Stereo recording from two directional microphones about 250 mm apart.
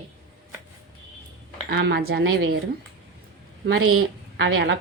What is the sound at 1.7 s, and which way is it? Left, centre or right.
Speech, right.